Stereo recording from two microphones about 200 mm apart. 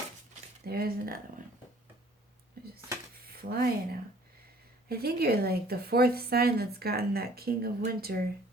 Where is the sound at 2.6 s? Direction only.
50° right (ahead or behind).